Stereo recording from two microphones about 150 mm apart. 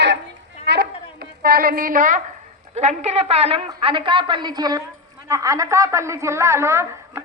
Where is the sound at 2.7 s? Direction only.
45° right (ahead or behind).